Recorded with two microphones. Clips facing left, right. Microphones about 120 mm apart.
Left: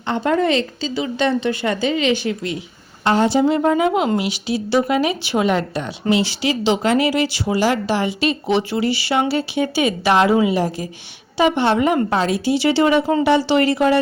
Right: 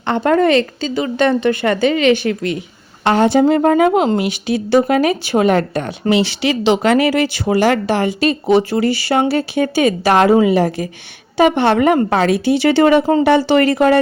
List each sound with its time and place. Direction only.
0.0 s a woman's voice: 60° right (ahead or behind)